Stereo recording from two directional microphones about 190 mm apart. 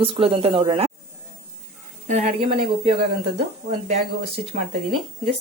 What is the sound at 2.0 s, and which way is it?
Speech, 35° right (ahead or behind).